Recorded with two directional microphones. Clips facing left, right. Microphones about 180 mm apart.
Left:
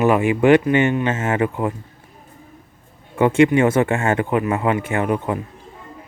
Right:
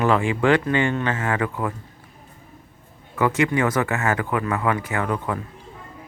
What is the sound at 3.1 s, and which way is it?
Speech, 25° left (ahead or behind).